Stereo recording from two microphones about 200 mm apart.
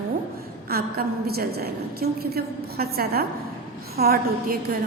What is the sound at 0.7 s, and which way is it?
A woman's voice, 50° right (ahead or behind).